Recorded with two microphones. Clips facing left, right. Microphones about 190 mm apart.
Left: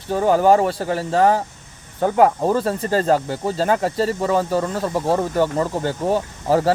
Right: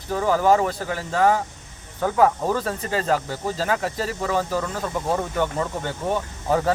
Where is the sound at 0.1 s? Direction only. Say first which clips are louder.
Left 4 dB; 30° left (ahead or behind).